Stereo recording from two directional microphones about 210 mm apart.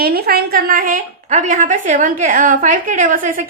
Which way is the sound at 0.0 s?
45° right (ahead or behind).